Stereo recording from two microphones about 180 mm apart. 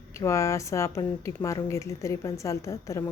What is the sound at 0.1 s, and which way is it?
Speech, 15° left (ahead or behind).